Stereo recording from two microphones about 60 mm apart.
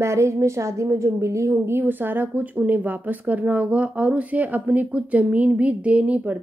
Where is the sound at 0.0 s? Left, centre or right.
Right.